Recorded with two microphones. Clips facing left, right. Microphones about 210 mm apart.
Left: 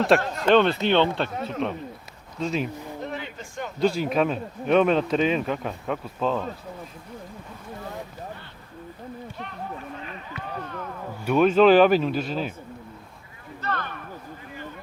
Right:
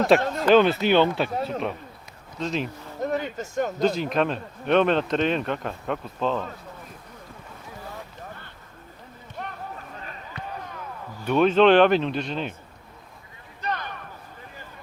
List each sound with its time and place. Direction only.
0.1 s speech: centre (ahead or behind)
1.4 s speech: 35° right (ahead or behind)
2.4 s speech: 5° left (ahead or behind)
3.0 s a sound: 45° right (ahead or behind)
3.8 s speech: 10° left (ahead or behind)
9.4 s a sound: 50° right (ahead or behind)
10.0 s run: 40° right (ahead or behind)
11.3 s speech: 5° left (ahead or behind)
13.6 s a sound: 15° right (ahead or behind)